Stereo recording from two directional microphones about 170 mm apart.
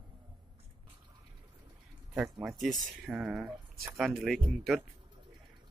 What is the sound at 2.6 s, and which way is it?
Speech, centre (ahead or behind).